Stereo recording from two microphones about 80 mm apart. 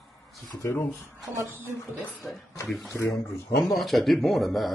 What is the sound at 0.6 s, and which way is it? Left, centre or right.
Speech, left.